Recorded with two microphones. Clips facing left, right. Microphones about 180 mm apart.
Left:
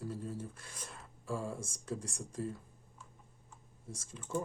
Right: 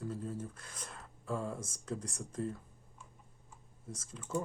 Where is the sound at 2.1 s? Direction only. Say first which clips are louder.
Right 1 dB; 30° left (ahead or behind).